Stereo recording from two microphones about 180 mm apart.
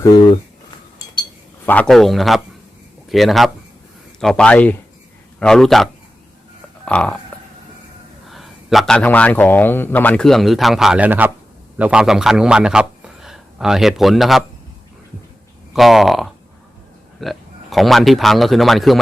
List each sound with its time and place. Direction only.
0.0 s speech: 25° left (ahead or behind)
1.6 s a man's voice: 10° left (ahead or behind)
8.3 s a man's voice: centre (ahead or behind)
15.7 s a man's voice: centre (ahead or behind)